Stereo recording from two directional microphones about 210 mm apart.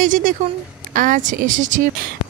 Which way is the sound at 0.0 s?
40° right (ahead or behind).